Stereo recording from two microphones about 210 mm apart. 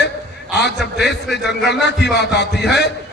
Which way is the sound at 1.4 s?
55° left (ahead or behind).